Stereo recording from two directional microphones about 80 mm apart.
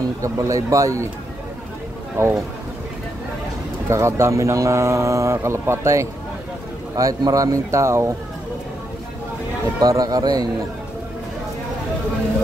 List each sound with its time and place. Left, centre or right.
0.2 s speech: right
2.1 s speech: right
3.9 s speech: right
9.8 s speech: right